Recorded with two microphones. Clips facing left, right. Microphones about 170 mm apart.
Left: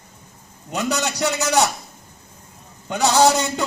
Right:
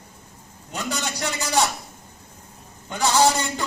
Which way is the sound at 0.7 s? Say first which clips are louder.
Left 6 dB; 75° left (ahead or behind).